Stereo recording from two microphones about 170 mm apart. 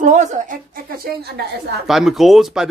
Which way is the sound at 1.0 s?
75° right (ahead or behind).